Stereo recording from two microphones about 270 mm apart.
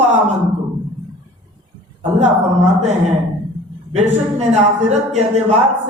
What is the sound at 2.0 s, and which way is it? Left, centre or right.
Speech, right.